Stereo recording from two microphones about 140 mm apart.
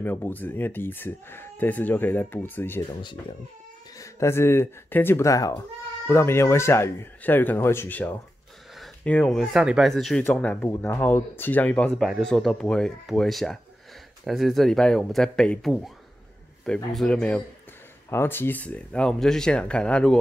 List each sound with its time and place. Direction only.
0.0 s speech: 15° left (ahead or behind)
4.0 s speech: 20° left (ahead or behind)
8.7 s a sound: centre (ahead or behind)
9.1 s speech: 5° left (ahead or behind)